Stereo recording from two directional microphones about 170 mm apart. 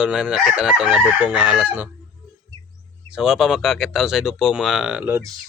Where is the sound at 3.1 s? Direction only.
5° right (ahead or behind).